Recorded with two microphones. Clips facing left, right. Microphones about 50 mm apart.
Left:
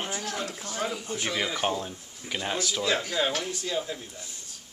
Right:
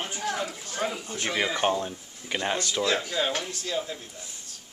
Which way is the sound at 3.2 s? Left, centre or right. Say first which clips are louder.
Even; centre.